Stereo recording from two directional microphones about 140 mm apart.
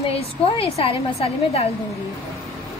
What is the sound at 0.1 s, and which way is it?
A woman's voice, 40° left (ahead or behind).